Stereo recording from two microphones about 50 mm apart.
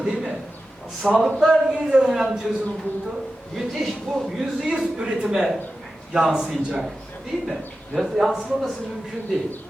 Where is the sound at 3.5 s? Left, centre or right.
Centre.